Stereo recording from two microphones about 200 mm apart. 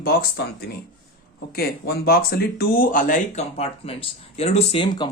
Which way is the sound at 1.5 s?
55° left (ahead or behind).